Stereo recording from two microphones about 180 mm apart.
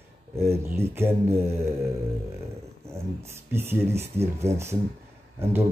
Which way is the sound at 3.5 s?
15° right (ahead or behind).